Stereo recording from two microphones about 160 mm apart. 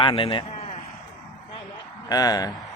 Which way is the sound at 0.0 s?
30° left (ahead or behind).